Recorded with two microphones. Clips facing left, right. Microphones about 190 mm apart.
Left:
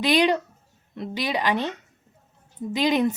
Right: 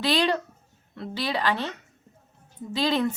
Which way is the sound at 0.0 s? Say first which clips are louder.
Left 3 dB; 15° left (ahead or behind).